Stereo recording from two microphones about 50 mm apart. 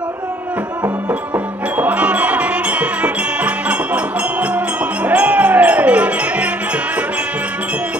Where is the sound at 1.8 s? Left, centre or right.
Right.